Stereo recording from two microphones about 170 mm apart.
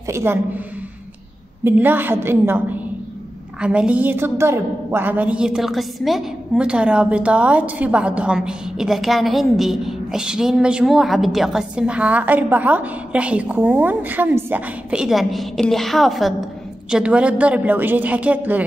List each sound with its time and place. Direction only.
0.1 s a woman's voice: 15° right (ahead or behind)
1.6 s a woman's voice: 10° right (ahead or behind)